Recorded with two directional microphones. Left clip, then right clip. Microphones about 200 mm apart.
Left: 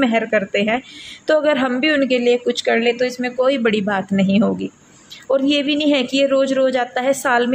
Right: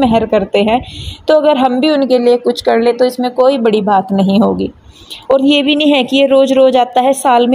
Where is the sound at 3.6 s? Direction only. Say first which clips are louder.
Right 7 dB; 15° right (ahead or behind).